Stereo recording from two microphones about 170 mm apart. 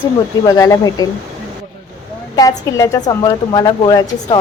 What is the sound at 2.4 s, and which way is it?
A woman's voice, 20° left (ahead or behind).